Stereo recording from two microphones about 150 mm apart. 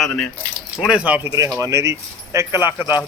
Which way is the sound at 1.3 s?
25° right (ahead or behind).